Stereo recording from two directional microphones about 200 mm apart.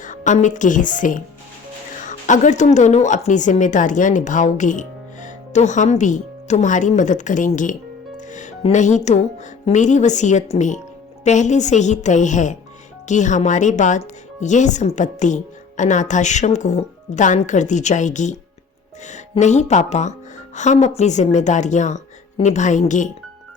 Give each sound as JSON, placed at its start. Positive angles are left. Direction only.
{"t": 0.0, "sound": "a woman's voice", "side_deg": 40}
{"t": 8.3, "sound": "music", "side_deg": 40}
{"t": 9.6, "sound": "a woman's voice", "side_deg": 35}